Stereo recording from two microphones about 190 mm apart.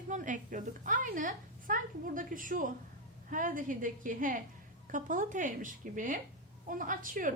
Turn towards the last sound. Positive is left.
turn(degrees=-45)  # may be behind; listen again after turning